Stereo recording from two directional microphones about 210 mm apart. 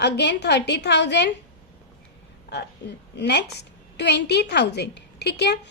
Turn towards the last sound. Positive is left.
turn(degrees=55)  # may be behind; listen again after turning